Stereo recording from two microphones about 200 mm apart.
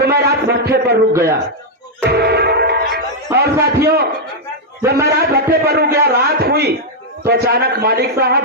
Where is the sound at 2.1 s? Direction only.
55° right (ahead or behind).